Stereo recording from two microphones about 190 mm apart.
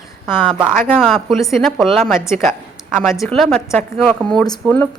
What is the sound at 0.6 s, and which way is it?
A woman's voice, centre (ahead or behind).